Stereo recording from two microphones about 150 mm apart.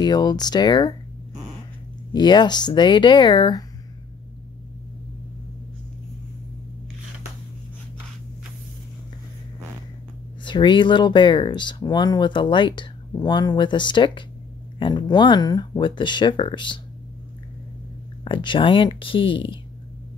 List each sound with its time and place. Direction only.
0.0 s speech: 30° left (ahead or behind)
2.1 s speech: 30° left (ahead or behind)
10.4 s speech: 30° left (ahead or behind)
18.2 s speech: 35° left (ahead or behind)